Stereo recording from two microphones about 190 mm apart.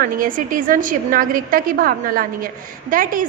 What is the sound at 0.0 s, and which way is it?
A woman's voice, 45° right (ahead or behind).